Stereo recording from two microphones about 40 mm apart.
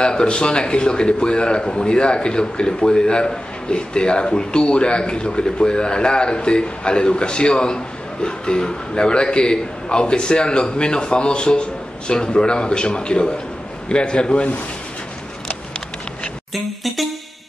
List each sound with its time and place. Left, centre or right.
0.0 s a man's voice: left
16.5 s music: centre